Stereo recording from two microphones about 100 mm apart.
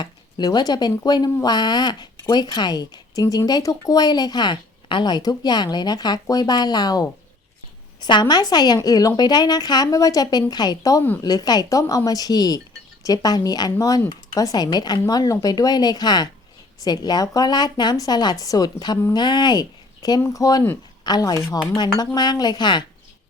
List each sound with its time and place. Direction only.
0.0 s a woman's voice: 45° left (ahead or behind)